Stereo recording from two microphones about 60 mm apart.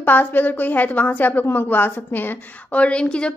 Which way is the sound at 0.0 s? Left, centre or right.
Left.